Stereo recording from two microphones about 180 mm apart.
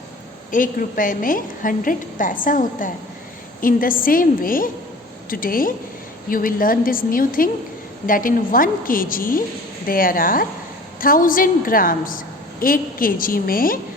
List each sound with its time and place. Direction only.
0.5 s a woman's voice: 50° left (ahead or behind)